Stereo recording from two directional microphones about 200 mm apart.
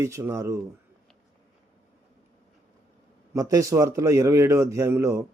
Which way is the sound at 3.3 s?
15° right (ahead or behind).